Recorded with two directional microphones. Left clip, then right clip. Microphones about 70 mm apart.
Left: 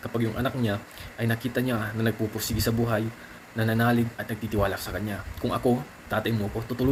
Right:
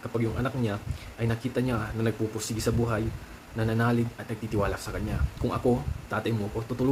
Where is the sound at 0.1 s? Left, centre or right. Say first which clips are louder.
Left 2 dB; centre.